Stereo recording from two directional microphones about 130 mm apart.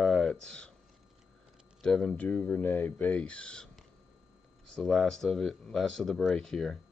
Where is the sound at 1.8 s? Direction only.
5° left (ahead or behind).